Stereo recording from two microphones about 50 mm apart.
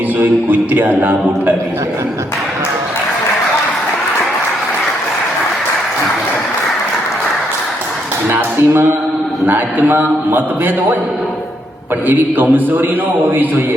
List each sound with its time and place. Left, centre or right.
0.2 s a man's voice: right
8.3 s a man's voice: right
12.0 s a man's voice: right